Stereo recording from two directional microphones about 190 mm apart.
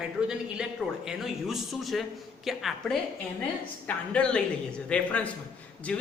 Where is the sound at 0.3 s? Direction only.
5° right (ahead or behind).